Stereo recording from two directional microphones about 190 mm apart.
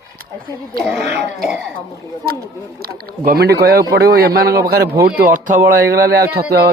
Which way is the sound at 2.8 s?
50° right (ahead or behind).